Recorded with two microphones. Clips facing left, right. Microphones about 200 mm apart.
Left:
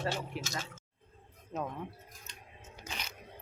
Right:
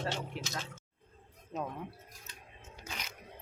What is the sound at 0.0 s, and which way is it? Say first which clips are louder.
Speech: left 2 dB; centre (ahead or behind).